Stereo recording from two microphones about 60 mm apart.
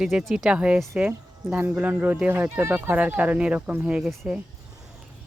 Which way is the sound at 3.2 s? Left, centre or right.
Centre.